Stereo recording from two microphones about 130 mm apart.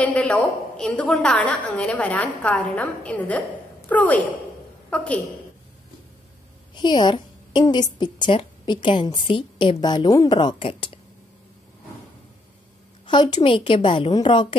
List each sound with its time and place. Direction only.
0.0 s a woman's voice: 10° left (ahead or behind)
6.7 s a woman's voice: 35° left (ahead or behind)
13.0 s a woman's voice: 35° left (ahead or behind)